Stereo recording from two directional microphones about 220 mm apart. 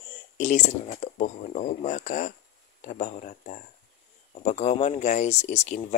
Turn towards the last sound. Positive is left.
turn(degrees=30)  # may be behind; listen again after turning